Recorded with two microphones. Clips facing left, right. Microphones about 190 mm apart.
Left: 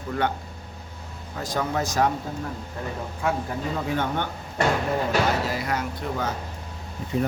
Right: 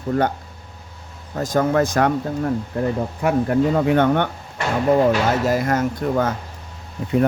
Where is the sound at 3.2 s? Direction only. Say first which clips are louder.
Right 9 dB; 65° right (ahead or behind).